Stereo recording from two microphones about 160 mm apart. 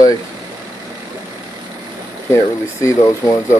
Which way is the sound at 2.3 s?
20° left (ahead or behind).